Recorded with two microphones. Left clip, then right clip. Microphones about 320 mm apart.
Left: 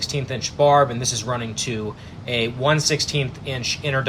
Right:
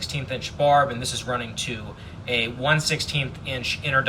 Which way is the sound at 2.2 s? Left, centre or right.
Left.